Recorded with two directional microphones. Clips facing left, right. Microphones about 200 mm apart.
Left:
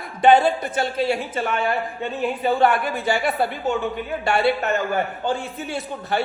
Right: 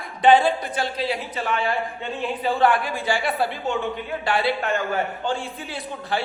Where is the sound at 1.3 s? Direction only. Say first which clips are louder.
Left 2 dB; 50° left (ahead or behind).